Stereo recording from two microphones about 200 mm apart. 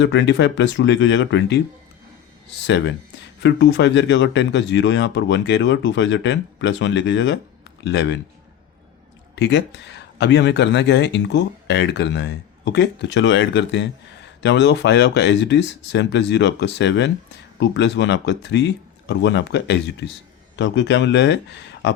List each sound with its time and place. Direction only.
0.0 s speech: 60° left (ahead or behind)
9.3 s speech: 60° left (ahead or behind)